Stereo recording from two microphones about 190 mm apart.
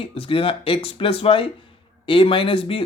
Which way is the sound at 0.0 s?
30° left (ahead or behind).